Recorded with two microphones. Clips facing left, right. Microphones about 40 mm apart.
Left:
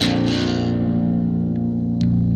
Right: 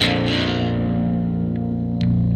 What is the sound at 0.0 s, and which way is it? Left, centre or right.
Music, right.